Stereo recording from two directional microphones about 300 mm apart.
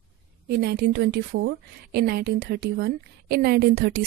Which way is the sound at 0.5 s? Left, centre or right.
Right.